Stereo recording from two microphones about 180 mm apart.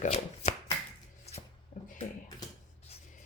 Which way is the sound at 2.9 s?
35° left (ahead or behind).